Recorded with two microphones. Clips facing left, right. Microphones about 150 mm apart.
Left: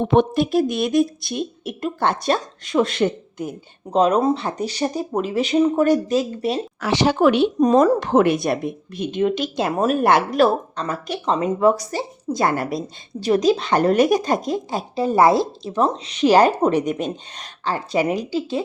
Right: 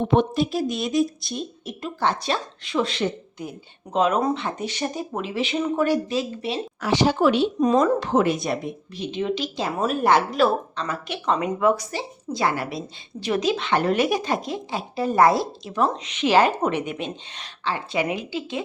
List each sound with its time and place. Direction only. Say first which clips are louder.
0.0 s speech: left 3 dB; 65° left (ahead or behind)
3.9 s speech: left 4 dB; 35° left (ahead or behind)
6.7 s speech: left 1 dB; 80° left; by 7.5 s 60° left (ahead or behind)
7.6 s a woman's voice: left 5 dB; 40° left (ahead or behind)
13.2 s speech: left 6 dB; 35° left (ahead or behind)
14.9 s a woman's voice: left 3 dB; 25° left (ahead or behind)